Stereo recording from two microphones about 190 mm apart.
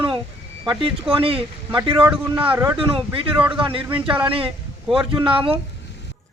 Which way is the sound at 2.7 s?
30° right (ahead or behind).